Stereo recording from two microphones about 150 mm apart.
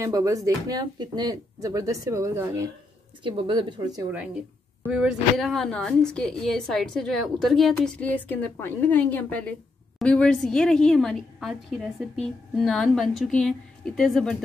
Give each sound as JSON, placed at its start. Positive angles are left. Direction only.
{"t": 0.0, "sound": "speech", "side_deg": -25}
{"t": 3.3, "sound": "speech", "side_deg": -30}
{"t": 4.8, "sound": "a woman's voice", "side_deg": -5}